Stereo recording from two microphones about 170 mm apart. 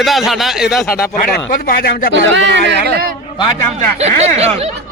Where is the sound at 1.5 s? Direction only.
60° left (ahead or behind).